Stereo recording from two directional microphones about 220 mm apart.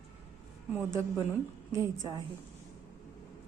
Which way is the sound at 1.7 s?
15° right (ahead or behind).